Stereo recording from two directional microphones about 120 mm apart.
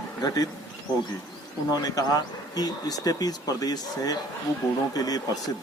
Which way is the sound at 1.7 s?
30° left (ahead or behind).